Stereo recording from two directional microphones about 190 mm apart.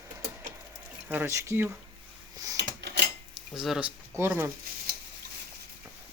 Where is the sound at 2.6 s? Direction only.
65° right (ahead or behind).